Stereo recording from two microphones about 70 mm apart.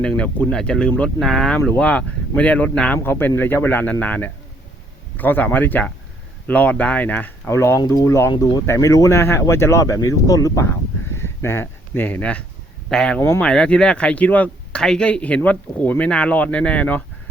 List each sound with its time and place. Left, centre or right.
0.0 s speech: centre
1.2 s speech: centre
1.8 s speech: centre
2.9 s speech: left
7.5 s speech: left
7.8 s speech: left
8.6 s speech: left
11.1 s a sound: left
12.2 s speech: centre
12.9 s speech: centre
13.1 s speech: left
13.4 s speech: centre
14.8 s speech: centre